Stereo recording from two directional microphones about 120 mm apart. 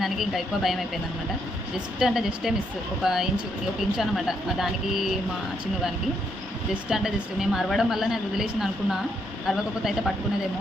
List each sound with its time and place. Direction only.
0.0 s a woman's voice: centre (ahead or behind)
2.0 s a woman's voice: 5° right (ahead or behind)
6.9 s a woman's voice: 5° right (ahead or behind)